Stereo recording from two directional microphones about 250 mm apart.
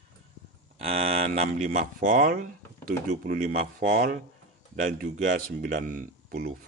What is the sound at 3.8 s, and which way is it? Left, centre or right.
Speech, right.